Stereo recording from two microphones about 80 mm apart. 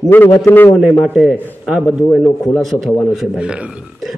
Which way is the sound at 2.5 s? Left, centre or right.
Centre.